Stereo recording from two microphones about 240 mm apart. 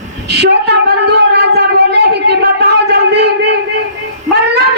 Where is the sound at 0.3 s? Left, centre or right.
Right.